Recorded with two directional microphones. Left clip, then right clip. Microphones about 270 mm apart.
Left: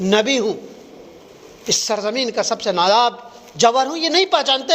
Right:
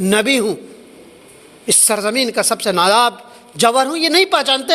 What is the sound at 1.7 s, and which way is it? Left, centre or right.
A man's voice, right.